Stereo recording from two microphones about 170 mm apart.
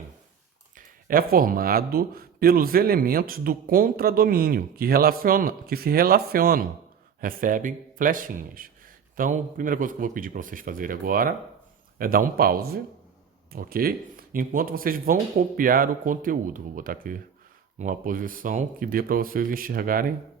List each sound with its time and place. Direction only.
0.8 s a man's voice: 55° right (ahead or behind)